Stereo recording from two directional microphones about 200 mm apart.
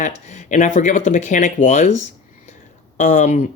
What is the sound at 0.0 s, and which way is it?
Speech, 35° left (ahead or behind).